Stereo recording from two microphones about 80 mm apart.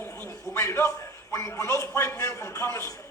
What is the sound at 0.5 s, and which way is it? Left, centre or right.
A man's voice, left.